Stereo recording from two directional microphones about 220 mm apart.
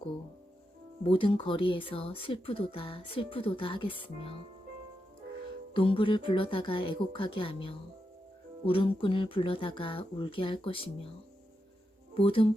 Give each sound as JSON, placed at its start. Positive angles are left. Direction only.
{"t": 1.0, "sound": "speech", "side_deg": 25}
{"t": 5.7, "sound": "speech", "side_deg": 25}
{"t": 12.1, "sound": "speech", "side_deg": 25}